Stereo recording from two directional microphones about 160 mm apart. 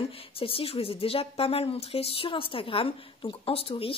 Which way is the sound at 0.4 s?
35° left (ahead or behind).